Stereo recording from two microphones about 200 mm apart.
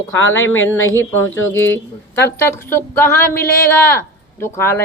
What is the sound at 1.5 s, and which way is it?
Speech, 10° left (ahead or behind).